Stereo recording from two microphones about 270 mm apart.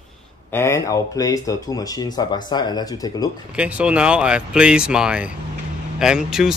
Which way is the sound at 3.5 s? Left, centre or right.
Centre.